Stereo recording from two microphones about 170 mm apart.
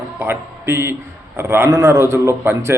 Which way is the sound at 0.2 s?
15° right (ahead or behind).